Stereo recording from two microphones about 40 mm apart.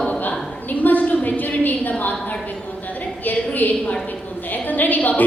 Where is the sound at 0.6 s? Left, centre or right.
Left.